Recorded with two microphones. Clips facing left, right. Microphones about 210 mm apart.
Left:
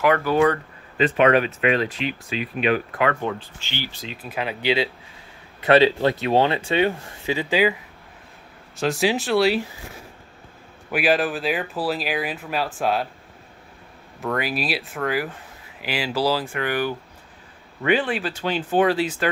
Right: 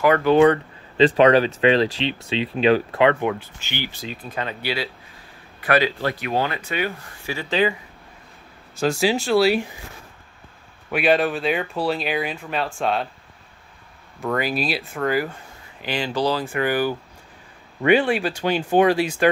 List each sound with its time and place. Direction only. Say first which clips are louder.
0.2 s speech: right 4 dB; 25° right (ahead or behind)
4.0 s speech: even; centre (ahead or behind)
4.6 s speech: left 5 dB; 20° left (ahead or behind)
8.7 s speech: right 1 dB; centre (ahead or behind)
10.9 s speech: right 2 dB; 5° left (ahead or behind)
14.2 s speech: right 2 dB; centre (ahead or behind)
16.4 s speech: right 3 dB; 5° right (ahead or behind)